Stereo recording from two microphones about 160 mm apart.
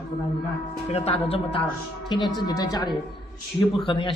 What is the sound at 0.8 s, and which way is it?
Speech, 40° left (ahead or behind).